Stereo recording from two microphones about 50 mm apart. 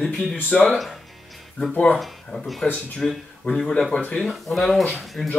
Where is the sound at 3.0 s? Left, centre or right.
Centre.